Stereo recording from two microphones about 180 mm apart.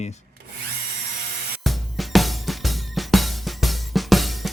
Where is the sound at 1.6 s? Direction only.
Centre (ahead or behind).